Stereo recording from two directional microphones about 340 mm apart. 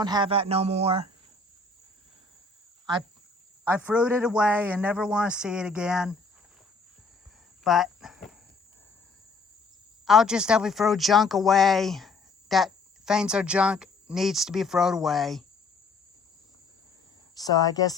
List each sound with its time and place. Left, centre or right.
0.0 s a man's voice: centre
3.6 s speech: centre
7.6 s a sound: centre
10.1 s speech: centre
17.3 s speech: centre